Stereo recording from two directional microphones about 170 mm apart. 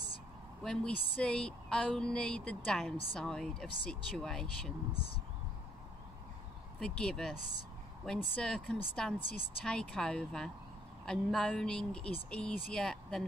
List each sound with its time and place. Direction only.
0.7 s speech: 5° left (ahead or behind)
4.9 s speech: 30° left (ahead or behind)
6.8 s speech: 5° left (ahead or behind)